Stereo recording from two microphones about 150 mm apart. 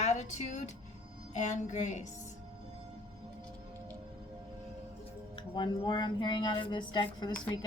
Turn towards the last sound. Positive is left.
turn(degrees=30)  # may be behind; listen again after turning